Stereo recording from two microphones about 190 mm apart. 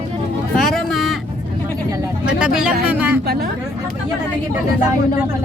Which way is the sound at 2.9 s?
10° right (ahead or behind).